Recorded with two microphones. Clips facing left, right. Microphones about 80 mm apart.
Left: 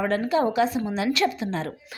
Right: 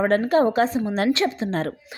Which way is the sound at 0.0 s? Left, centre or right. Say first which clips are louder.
Right 4 dB; right.